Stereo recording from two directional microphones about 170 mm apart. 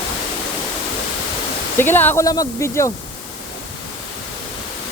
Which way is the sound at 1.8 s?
10° left (ahead or behind).